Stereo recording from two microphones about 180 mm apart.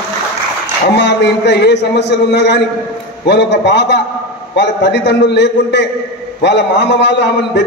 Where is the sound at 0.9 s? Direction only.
70° left (ahead or behind).